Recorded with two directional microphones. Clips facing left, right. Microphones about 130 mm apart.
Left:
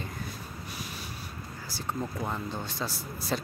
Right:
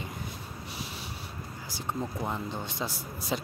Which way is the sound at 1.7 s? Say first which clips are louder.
Even; 15° right (ahead or behind).